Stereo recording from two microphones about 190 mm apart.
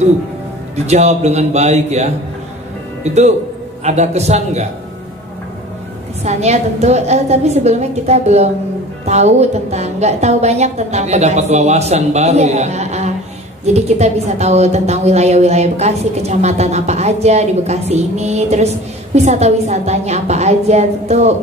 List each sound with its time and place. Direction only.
0.8 s a woman's voice: 35° right (ahead or behind)
6.2 s a woman's voice: 35° right (ahead or behind)